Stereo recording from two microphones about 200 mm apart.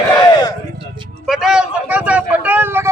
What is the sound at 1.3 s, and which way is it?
Vehicle, centre (ahead or behind).